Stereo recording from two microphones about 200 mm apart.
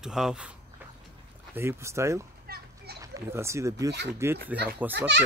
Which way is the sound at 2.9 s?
55° right (ahead or behind).